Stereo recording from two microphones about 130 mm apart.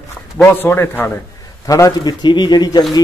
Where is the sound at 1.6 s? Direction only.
25° left (ahead or behind).